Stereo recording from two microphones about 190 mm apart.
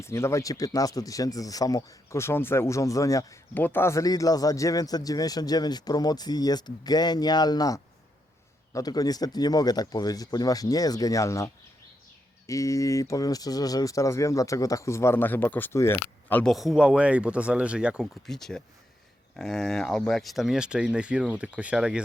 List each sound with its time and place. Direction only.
0.0 s speech: 15° left (ahead or behind); by 22.0 s 5° right (ahead or behind)